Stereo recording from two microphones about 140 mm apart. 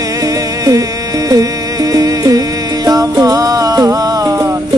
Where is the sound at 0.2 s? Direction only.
25° right (ahead or behind).